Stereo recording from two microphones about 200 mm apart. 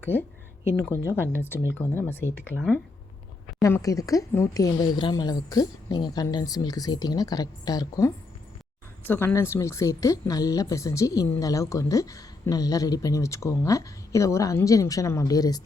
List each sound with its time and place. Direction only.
0.0 s a woman's voice: 10° left (ahead or behind)
3.6 s a woman's voice: 15° left (ahead or behind)